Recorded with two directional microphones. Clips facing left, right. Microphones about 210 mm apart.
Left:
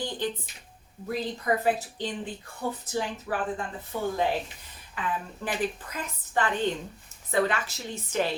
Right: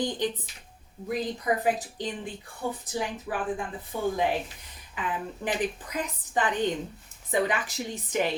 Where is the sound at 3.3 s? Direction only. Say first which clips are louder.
Left 2 dB; 15° right (ahead or behind).